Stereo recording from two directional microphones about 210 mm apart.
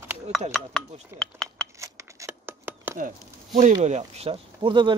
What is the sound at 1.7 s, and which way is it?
Scissors, 15° right (ahead or behind).